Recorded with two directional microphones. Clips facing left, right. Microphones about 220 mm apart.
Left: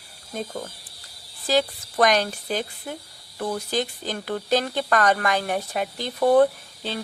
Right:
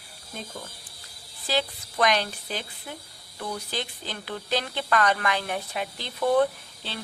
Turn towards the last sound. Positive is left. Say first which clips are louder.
# left 7 dB
turn(degrees=45)  # may be behind; listen again after turning